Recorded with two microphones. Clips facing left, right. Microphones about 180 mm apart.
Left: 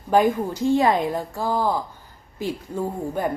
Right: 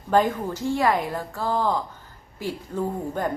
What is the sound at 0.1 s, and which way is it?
A woman's voice, 15° left (ahead or behind).